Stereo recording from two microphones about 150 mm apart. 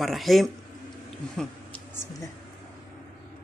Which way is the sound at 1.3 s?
5° left (ahead or behind).